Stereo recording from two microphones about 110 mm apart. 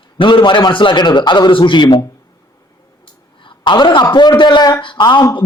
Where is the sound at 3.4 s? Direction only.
40° left (ahead or behind).